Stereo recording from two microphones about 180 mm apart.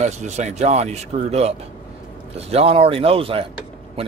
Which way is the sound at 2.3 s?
35° right (ahead or behind).